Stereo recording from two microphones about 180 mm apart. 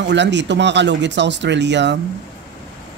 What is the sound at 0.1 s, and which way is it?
Speech, 75° right (ahead or behind).